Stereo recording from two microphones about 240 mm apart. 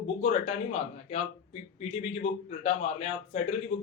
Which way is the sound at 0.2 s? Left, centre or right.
Left.